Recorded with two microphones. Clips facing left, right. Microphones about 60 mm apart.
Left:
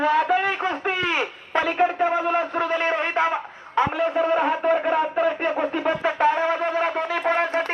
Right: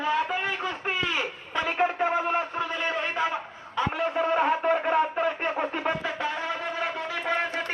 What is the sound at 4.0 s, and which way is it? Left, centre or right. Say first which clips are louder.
Speech: left 1 dB; left.